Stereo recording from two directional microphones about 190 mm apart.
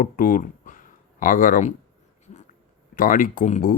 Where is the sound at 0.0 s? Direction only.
45° left (ahead or behind).